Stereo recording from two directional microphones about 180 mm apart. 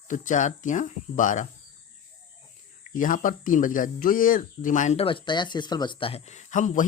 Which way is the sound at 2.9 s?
45° left (ahead or behind).